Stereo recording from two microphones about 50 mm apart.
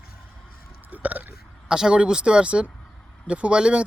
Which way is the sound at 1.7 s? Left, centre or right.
Centre.